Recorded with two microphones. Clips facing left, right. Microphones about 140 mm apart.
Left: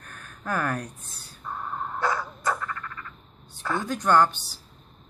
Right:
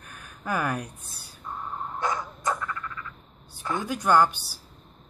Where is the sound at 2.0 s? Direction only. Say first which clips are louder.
Left 2 dB; 20° right (ahead or behind).